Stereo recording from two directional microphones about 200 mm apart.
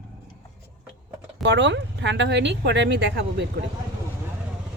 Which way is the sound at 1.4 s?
60° right (ahead or behind).